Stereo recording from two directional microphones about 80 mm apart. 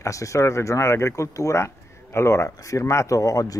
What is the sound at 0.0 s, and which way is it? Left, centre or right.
Speech, left.